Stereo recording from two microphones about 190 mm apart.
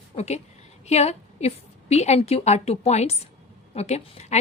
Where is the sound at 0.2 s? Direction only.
35° left (ahead or behind).